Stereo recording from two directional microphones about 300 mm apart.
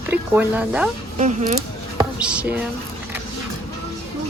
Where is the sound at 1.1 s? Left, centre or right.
Right.